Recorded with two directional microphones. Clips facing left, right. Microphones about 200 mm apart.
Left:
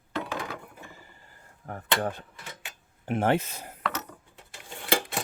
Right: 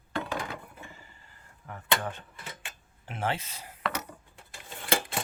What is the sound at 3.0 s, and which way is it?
Speech, 50° left (ahead or behind).